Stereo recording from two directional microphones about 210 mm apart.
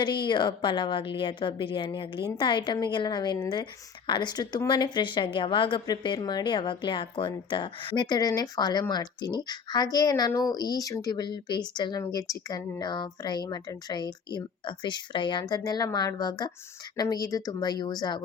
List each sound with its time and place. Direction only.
0.0 s a woman's voice: 20° left (ahead or behind)